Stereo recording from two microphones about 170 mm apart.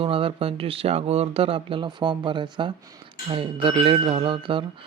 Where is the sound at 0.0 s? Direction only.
35° right (ahead or behind).